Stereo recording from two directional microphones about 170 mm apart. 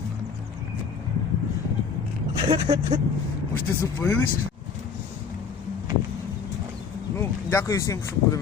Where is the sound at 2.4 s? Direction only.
25° right (ahead or behind).